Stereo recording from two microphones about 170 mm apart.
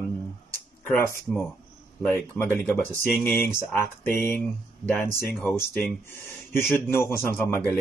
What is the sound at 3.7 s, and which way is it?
Speech, 15° left (ahead or behind).